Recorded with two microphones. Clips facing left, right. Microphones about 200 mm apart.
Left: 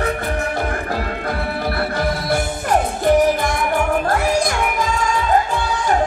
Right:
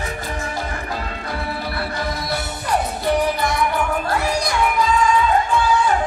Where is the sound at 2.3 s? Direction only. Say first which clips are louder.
Left 4 dB; 50° left (ahead or behind).